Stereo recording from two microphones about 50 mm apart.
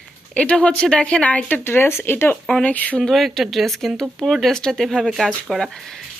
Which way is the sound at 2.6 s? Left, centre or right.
Left.